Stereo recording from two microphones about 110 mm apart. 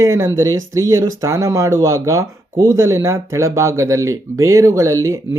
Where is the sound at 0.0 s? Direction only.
25° right (ahead or behind).